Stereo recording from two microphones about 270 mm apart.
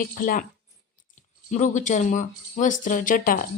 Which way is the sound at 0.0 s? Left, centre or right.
Left.